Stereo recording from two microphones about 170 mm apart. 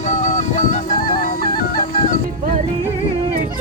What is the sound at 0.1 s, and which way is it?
Music, 45° left (ahead or behind).